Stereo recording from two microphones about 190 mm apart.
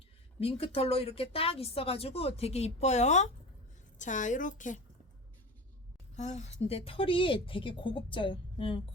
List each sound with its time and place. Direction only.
0.3 s speech: 30° left (ahead or behind)
6.1 s speech: 35° left (ahead or behind)